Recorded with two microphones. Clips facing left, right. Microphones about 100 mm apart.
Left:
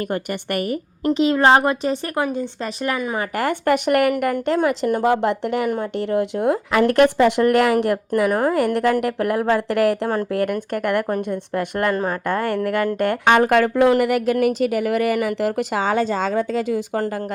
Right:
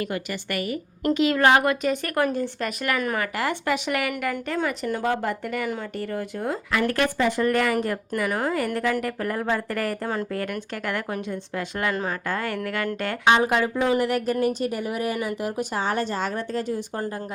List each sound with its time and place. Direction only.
0.1 s speech: 50° left (ahead or behind)
1.0 s a woman's voice: 25° left (ahead or behind)
2.2 s speech: 20° left (ahead or behind)
3.3 s speech: 50° left (ahead or behind)
4.4 s a woman's voice: 60° left (ahead or behind); by 17.1 s 85° left